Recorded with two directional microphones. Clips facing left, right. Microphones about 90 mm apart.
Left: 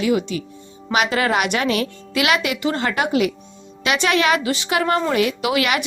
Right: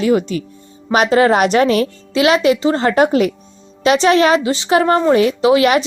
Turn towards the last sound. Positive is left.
turn(degrees=-30)  # may be behind; listen again after turning